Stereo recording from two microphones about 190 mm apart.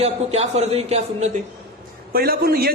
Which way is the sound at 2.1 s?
55° right (ahead or behind).